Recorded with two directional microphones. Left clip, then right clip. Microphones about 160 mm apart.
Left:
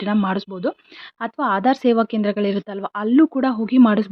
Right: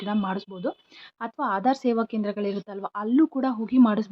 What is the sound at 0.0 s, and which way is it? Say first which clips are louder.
Speech: left 7 dB; 35° left (ahead or behind).